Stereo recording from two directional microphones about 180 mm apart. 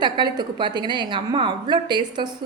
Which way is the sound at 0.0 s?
25° right (ahead or behind).